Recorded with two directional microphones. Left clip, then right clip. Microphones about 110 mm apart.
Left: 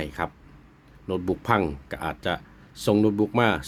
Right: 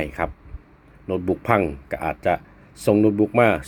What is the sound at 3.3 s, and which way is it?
Speech, 10° left (ahead or behind).